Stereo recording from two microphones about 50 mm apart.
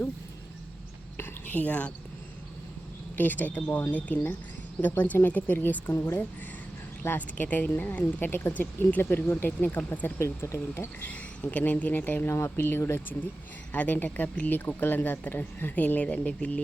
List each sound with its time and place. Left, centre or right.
1.1 s a sound: left
1.6 s speech: left
3.2 s speech: left
7.2 s speech: left
10.2 s speech: left
11.0 s speech: left
13.7 s speech: left